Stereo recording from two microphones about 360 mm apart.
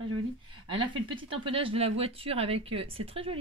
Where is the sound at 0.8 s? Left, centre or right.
Centre.